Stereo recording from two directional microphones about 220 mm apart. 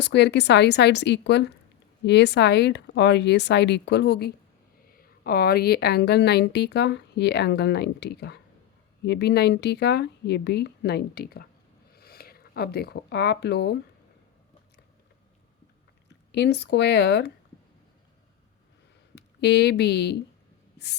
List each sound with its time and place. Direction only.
0.0 s speech: 50° left (ahead or behind)
16.3 s speech: 50° left (ahead or behind)
19.1 s speech: 50° left (ahead or behind)